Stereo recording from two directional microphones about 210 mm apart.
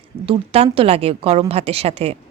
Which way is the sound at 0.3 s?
30° right (ahead or behind).